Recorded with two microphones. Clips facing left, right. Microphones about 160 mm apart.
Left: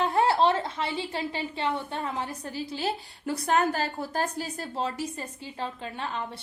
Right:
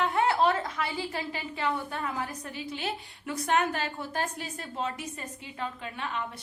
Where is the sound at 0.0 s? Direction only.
30° left (ahead or behind).